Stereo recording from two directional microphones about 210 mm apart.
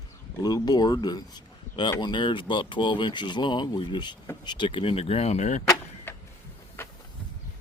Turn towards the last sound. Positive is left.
turn(degrees=10)  # may be behind; listen again after turning